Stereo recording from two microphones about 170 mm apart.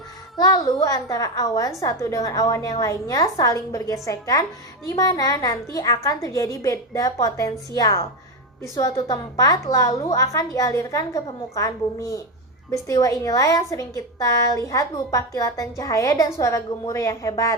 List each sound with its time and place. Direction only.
0.3 s a woman's voice: 20° left (ahead or behind)